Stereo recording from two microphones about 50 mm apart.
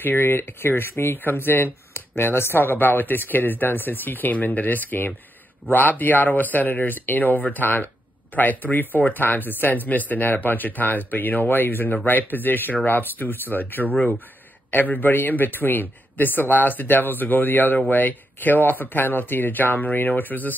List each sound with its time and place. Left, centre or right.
0.0 s a man's voice: left